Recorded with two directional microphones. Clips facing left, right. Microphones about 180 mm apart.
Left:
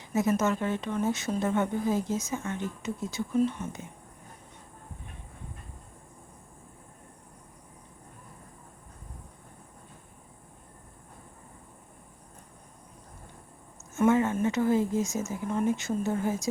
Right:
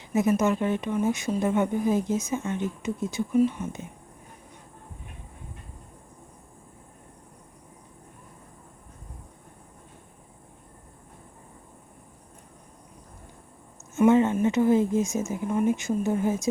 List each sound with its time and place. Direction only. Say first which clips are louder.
0.0 s speech: right 3 dB; 20° right (ahead or behind)
13.9 s speech: right 4 dB; 20° right (ahead or behind)